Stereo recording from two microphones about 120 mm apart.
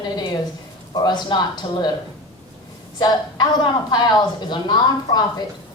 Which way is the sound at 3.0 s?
35° left (ahead or behind).